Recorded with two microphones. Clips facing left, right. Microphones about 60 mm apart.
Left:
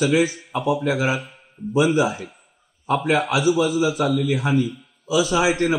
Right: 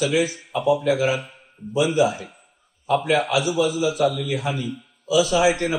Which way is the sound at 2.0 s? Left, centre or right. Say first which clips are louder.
Right 1 dB; centre.